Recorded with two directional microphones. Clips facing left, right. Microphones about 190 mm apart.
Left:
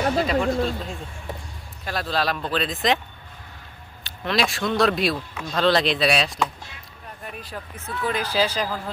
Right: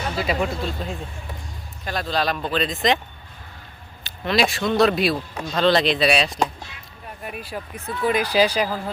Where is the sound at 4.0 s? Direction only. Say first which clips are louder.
Right 3 dB; centre (ahead or behind).